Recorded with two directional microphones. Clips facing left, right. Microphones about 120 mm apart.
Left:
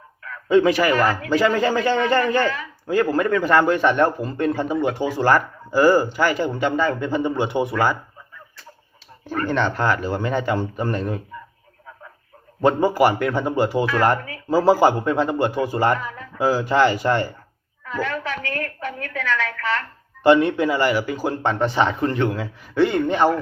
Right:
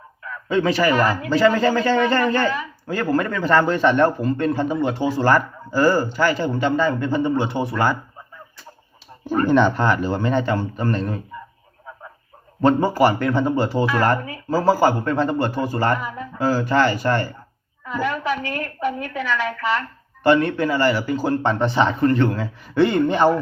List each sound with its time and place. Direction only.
0.4 s a man's voice: 15° left (ahead or behind)
9.5 s a man's voice: 5° right (ahead or behind); by 11.2 s 10° left (ahead or behind)
12.6 s a man's voice: 10° left (ahead or behind)
16.0 s speech: 15° right (ahead or behind)
16.4 s a man's voice: 15° left (ahead or behind)
17.8 s a woman's voice: 15° right (ahead or behind)
20.2 s a man's voice: 20° left (ahead or behind); by 23.3 s centre (ahead or behind)